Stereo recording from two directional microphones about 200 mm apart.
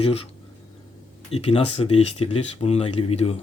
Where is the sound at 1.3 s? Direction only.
30° left (ahead or behind).